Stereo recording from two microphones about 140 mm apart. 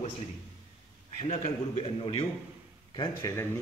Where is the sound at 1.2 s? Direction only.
50° left (ahead or behind); by 3.3 s 30° left (ahead or behind).